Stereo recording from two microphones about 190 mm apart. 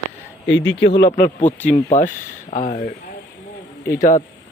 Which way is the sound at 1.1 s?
40° left (ahead or behind).